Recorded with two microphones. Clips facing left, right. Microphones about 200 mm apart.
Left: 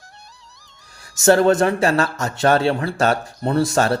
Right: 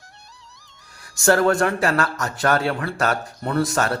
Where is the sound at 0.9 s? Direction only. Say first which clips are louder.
Left 3 dB; 25° left (ahead or behind).